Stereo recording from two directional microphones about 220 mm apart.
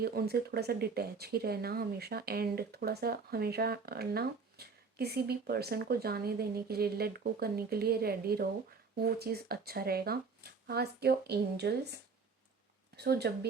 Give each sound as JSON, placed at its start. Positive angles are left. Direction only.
{"t": 0.0, "sound": "speech", "side_deg": -45}
{"t": 13.0, "sound": "speech", "side_deg": -45}